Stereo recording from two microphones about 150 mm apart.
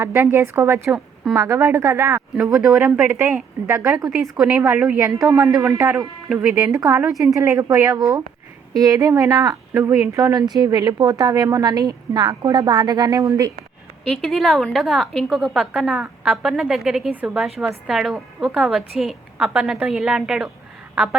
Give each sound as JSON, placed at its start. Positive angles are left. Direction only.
{"t": 0.0, "sound": "a woman's voice", "side_deg": -15}
{"t": 6.2, "sound": "speech", "side_deg": -5}
{"t": 6.6, "sound": "speech", "side_deg": -20}
{"t": 14.2, "sound": "a woman's voice", "side_deg": 0}